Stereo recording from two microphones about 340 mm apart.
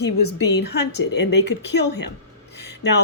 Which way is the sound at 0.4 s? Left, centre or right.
Left.